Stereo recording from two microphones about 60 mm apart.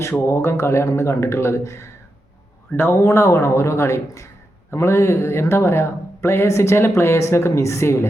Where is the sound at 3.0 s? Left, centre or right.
Left.